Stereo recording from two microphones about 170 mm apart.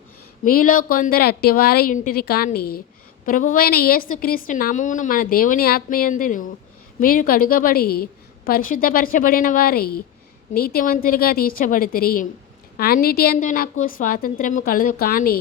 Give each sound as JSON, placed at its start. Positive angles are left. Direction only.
{"t": 0.4, "sound": "a woman's voice", "side_deg": 55}